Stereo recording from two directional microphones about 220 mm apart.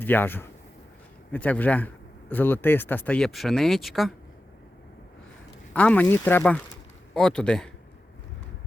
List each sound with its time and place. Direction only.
0.0 s speech: 10° left (ahead or behind)
5.7 s speech: 5° left (ahead or behind)